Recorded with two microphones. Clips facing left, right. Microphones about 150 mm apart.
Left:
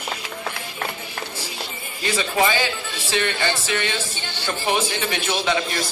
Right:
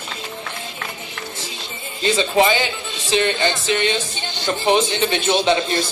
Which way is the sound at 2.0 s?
25° right (ahead or behind).